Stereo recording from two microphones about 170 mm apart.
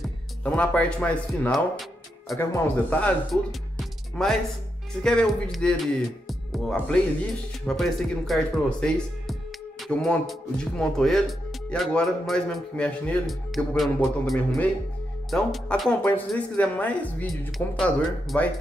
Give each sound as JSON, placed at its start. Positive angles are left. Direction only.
{"t": 0.4, "sound": "speech", "side_deg": 5}
{"t": 2.3, "sound": "speech", "side_deg": 20}
{"t": 3.0, "sound": "speech", "side_deg": 0}